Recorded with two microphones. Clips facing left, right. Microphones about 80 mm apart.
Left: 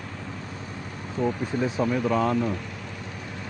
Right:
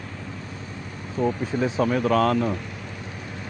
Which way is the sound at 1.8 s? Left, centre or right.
Right.